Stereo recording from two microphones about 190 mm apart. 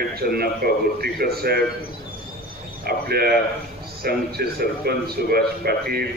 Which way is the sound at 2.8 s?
55° right (ahead or behind).